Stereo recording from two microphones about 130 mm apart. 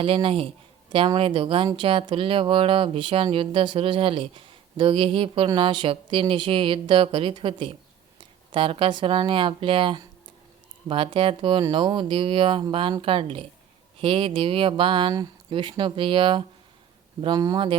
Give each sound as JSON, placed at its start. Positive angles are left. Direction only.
{"t": 0.0, "sound": "speech", "side_deg": -45}